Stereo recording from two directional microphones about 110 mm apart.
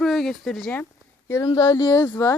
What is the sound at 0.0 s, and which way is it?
Speech, centre (ahead or behind).